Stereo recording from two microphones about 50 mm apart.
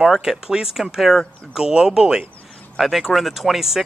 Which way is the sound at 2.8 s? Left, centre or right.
Centre.